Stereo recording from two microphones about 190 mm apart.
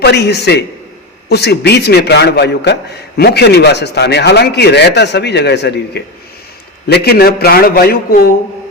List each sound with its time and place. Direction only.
0.0 s speech: 60° left (ahead or behind)